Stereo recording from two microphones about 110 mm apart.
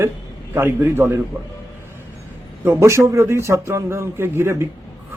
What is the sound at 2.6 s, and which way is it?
A man's voice, 25° right (ahead or behind).